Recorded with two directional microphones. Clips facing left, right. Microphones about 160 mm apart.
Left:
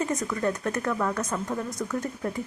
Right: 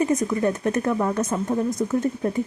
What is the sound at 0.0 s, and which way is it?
Speech, 20° right (ahead or behind).